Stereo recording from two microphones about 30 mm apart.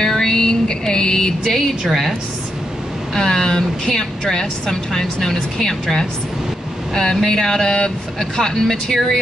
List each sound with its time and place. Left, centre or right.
0.2 s a sound: left
1.9 s a woman's voice: centre
3.2 s speech: left
7.2 s a sound: centre
7.6 s speech: left
8.4 s speech: centre